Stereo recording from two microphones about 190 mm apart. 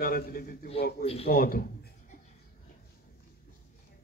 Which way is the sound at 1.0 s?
30° left (ahead or behind).